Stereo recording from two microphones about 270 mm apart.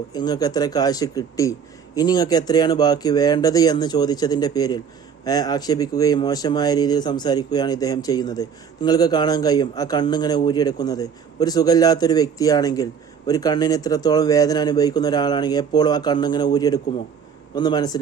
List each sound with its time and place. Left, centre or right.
0.1 s speech: centre